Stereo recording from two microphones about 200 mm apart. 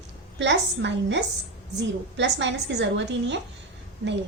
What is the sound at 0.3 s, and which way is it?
A woman's voice, 60° right (ahead or behind).